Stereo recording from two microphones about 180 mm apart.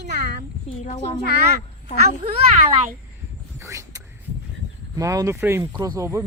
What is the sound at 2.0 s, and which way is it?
Speech, 40° right (ahead or behind).